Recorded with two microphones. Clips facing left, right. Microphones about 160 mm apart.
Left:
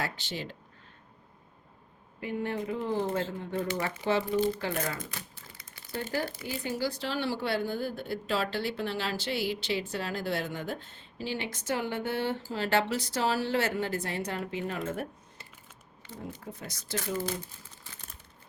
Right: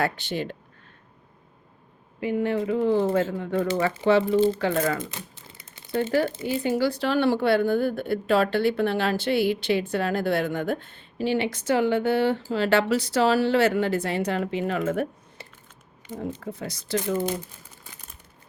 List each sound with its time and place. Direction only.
0.0 s a woman's voice: 55° right (ahead or behind)
2.2 s speech: 90° right
4.0 s speech: 70° right (ahead or behind)
4.4 s speech: 90° right
5.1 s typewriter: 25° right (ahead or behind)
5.9 s a woman's voice: 70° right (ahead or behind)